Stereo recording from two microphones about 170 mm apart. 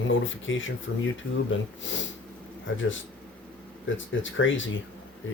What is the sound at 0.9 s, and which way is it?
Speech, 90° left.